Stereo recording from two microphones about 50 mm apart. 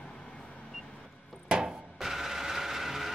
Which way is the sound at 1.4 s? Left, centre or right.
Centre.